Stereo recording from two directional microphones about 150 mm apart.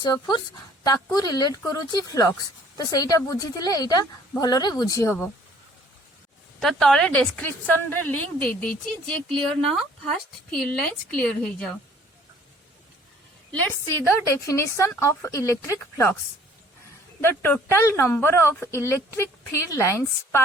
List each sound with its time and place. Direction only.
0.0 s a woman's voice: 30° left (ahead or behind)
6.6 s a woman's voice: centre (ahead or behind)
13.5 s a woman's voice: 10° left (ahead or behind)
17.2 s a woman's voice: 15° left (ahead or behind)